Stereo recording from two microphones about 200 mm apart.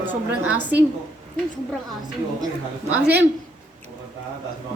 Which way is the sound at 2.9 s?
10° right (ahead or behind).